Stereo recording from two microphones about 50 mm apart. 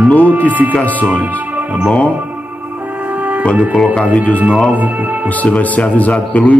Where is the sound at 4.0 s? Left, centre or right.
Left.